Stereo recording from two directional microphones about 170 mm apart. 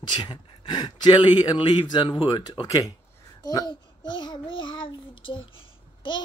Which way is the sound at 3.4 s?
20° left (ahead or behind).